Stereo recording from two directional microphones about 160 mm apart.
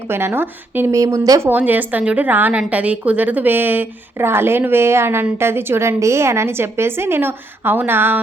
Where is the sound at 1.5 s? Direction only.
10° right (ahead or behind).